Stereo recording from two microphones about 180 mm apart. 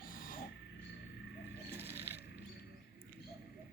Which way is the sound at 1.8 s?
10° right (ahead or behind).